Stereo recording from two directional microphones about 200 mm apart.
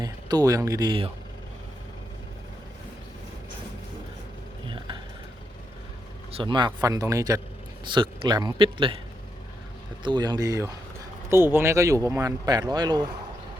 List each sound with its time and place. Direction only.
0.0 s speech: 20° right (ahead or behind)
4.6 s a sound: 25° right (ahead or behind)
6.3 s a man's voice: 25° right (ahead or behind)
10.0 s a man's voice: 20° right (ahead or behind)